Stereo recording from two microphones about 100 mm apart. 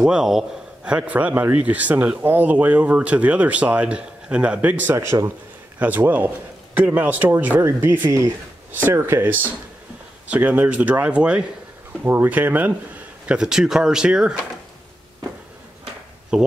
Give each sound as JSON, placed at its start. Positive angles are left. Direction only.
{"t": 0.0, "sound": "a man's voice", "side_deg": -5}
{"t": 4.9, "sound": "speech", "side_deg": -30}
{"t": 5.8, "sound": "a man's voice", "side_deg": -20}
{"t": 16.3, "sound": "a man's voice", "side_deg": -10}